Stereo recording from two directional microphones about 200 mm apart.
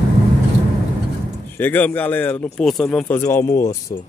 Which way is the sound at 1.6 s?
10° left (ahead or behind).